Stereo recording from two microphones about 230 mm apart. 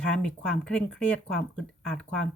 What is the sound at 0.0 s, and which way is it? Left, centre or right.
Speech, centre.